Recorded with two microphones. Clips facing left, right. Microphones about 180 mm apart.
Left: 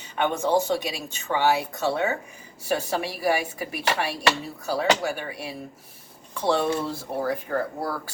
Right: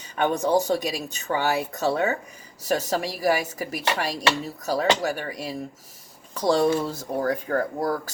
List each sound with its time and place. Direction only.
0.2 s speech: 35° right (ahead or behind)